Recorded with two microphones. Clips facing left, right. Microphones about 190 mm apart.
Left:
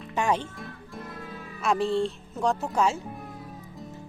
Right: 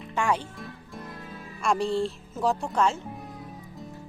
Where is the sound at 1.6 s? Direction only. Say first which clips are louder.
Left 1 dB; centre (ahead or behind).